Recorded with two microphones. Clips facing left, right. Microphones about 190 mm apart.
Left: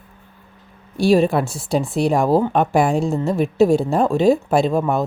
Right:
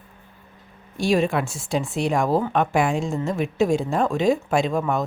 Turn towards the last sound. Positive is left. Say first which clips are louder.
# left 4 dB
turn(degrees=35)  # may be behind; listen again after turning